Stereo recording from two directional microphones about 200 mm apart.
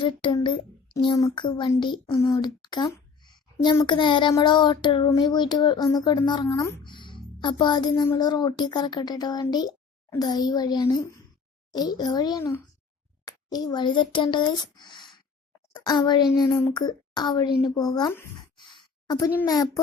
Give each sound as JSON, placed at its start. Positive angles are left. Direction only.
{"t": 0.0, "sound": "a child's voice", "side_deg": 25}
{"t": 18.5, "sound": "sigh", "side_deg": 25}
{"t": 19.4, "sound": "a child's voice", "side_deg": 20}